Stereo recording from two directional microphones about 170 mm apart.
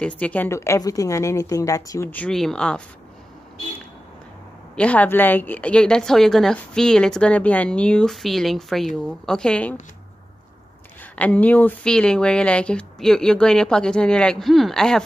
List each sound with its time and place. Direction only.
0.0 s a woman's voice: 10° left (ahead or behind)
4.7 s a woman's voice: 10° left (ahead or behind)
11.1 s a woman's voice: 10° left (ahead or behind)